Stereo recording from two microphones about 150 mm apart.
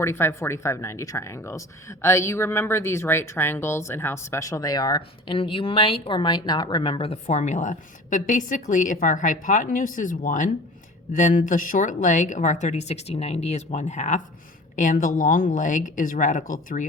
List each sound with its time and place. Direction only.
0.0 s speech: 15° left (ahead or behind); by 16.8 s 65° left (ahead or behind)